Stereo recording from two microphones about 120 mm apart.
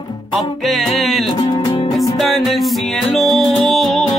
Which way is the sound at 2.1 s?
Centre (ahead or behind).